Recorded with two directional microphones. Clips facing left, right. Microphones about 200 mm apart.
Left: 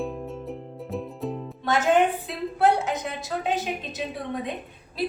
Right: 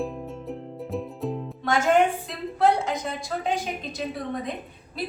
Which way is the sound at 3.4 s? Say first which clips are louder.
Left 1 dB; centre (ahead or behind).